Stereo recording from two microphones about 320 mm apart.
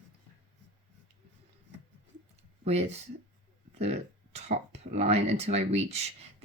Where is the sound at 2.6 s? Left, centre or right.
Centre.